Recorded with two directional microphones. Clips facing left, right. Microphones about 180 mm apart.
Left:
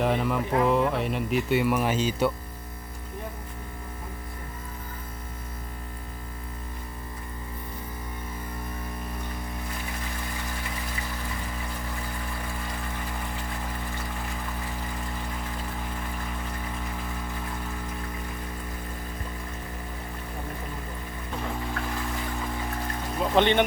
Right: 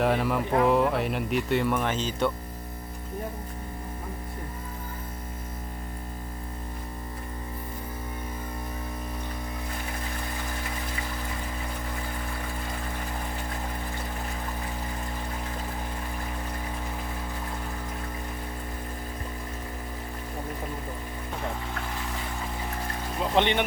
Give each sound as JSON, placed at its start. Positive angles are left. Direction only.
{"t": 0.0, "sound": "speech", "side_deg": 0}
{"t": 23.4, "sound": "speech", "side_deg": -15}